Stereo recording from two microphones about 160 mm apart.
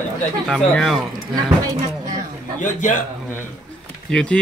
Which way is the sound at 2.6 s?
55° left (ahead or behind).